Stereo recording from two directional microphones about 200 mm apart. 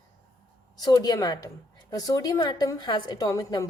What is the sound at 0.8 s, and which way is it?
A woman's voice, 20° left (ahead or behind).